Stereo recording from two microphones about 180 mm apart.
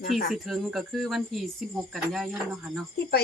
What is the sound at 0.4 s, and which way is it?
Speech, centre (ahead or behind).